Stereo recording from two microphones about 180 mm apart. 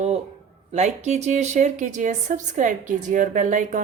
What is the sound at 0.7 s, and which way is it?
A woman's voice, 40° right (ahead or behind).